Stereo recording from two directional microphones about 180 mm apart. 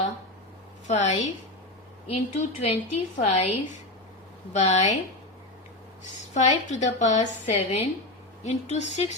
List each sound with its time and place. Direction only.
0.9 s a woman's voice: 40° left (ahead or behind)
4.5 s a woman's voice: 40° left (ahead or behind)
6.0 s a woman's voice: 40° left (ahead or behind)